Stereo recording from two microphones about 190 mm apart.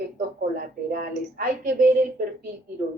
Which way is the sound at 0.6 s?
50° right (ahead or behind).